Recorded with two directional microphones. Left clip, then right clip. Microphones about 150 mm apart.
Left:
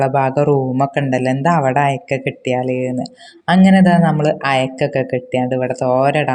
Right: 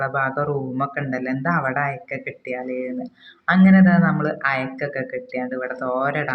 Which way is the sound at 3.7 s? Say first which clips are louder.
Left 5 dB; 55° left (ahead or behind).